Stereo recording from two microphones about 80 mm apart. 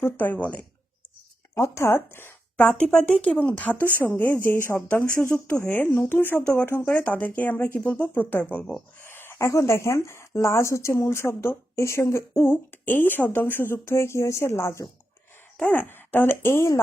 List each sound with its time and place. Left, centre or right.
0.0 s speech: left
1.5 s speech: left
9.0 s a sound: left
9.5 s speech: left
15.6 s speech: left